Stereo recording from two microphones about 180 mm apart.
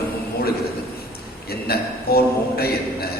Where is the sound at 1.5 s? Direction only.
60° left (ahead or behind).